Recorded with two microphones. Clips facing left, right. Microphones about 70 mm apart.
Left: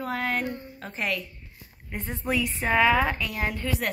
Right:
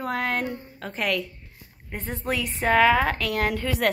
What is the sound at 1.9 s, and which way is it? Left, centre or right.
Speech, right.